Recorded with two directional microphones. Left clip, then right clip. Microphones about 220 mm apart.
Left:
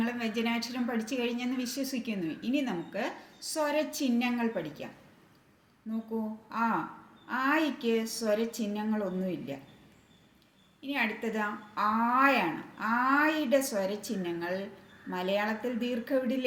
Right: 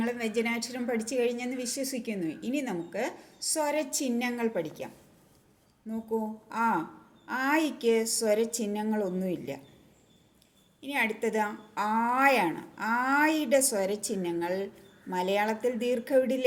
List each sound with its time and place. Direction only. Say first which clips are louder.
0.0 s a woman's voice: right 3 dB; 25° right (ahead or behind)
6.5 s speech: right 2 dB; 30° right (ahead or behind)
10.8 s a sound: right 3 dB; 30° right (ahead or behind)
11.2 s speech: right 4 dB; 30° right (ahead or behind)